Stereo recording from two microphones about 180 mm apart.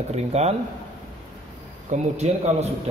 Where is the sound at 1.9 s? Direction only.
40° right (ahead or behind).